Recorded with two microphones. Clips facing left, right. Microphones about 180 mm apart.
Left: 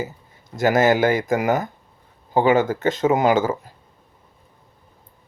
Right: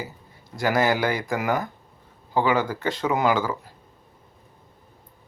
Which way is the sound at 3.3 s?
45° left (ahead or behind).